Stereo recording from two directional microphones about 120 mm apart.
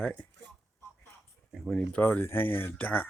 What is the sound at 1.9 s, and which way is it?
Speech, 15° left (ahead or behind).